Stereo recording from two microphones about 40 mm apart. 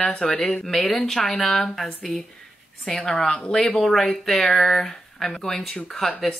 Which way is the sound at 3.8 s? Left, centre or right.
Centre.